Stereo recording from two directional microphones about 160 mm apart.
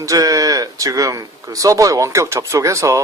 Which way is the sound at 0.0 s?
20° right (ahead or behind).